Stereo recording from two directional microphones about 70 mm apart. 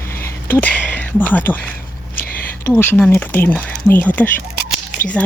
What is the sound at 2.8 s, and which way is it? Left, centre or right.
Speech, left.